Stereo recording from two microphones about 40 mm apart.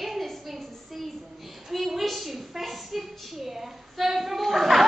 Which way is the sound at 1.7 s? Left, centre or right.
Centre.